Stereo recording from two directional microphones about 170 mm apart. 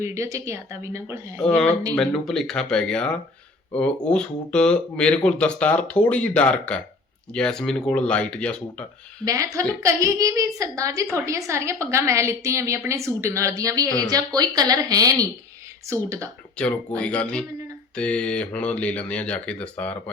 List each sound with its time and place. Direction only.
0.0 s a woman's voice: 15° right (ahead or behind)
1.4 s speech: 5° left (ahead or behind)
9.2 s a woman's voice: 20° right (ahead or behind)
16.6 s speech: 5° left (ahead or behind)